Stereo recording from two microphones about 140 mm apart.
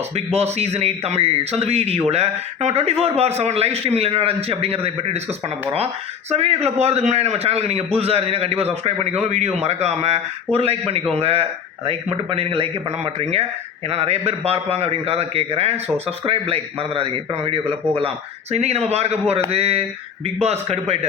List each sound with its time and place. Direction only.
0.3 s a man's voice: 50° right (ahead or behind)
6.3 s a man's voice: 50° right (ahead or behind)
13.9 s a man's voice: 45° right (ahead or behind)